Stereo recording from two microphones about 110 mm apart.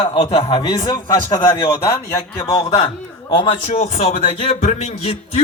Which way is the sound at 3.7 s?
85° left.